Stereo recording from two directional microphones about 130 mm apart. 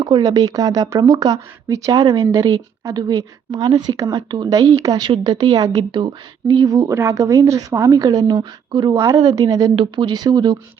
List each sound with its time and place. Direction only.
0.0 s speech: 30° right (ahead or behind)
9.7 s speech: 35° right (ahead or behind)